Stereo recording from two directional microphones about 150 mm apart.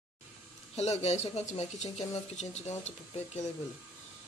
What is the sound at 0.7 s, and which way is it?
Speech, 45° left (ahead or behind).